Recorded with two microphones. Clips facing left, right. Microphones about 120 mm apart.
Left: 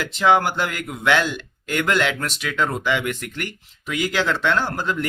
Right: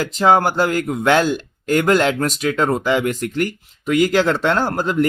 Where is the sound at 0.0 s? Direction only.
40° right (ahead or behind).